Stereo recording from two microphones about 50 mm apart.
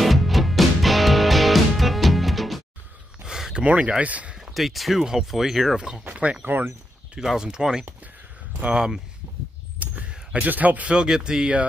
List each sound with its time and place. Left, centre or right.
0.0 s music: centre
3.3 s a sound: centre
3.6 s speech: right
4.6 s speech: centre
6.2 s speech: right
7.2 s speech: centre
9.8 s a sound: right
10.4 s speech: right
11.0 s speech: centre